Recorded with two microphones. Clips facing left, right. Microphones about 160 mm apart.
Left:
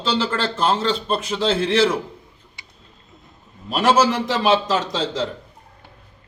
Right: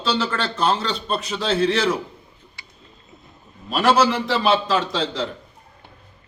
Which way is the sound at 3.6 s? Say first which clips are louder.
Left 1 dB; 15° left (ahead or behind).